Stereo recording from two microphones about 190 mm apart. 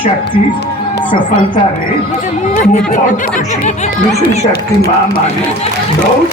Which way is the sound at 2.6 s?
40° left (ahead or behind).